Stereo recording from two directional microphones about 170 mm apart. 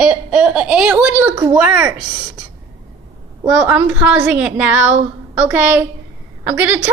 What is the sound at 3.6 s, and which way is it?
A woman's voice, 10° right (ahead or behind).